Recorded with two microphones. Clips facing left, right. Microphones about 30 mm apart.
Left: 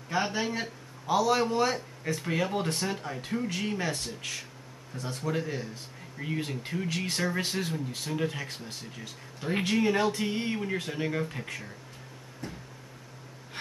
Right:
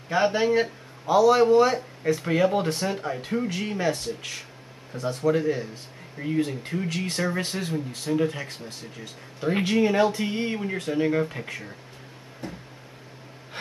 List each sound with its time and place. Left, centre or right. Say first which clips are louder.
0.1 s speech: right 8 dB; centre
1.0 s speech: right 8 dB; centre
6.2 s speech: right 7 dB; centre